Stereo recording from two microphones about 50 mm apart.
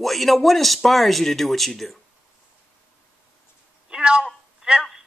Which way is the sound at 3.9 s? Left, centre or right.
Centre.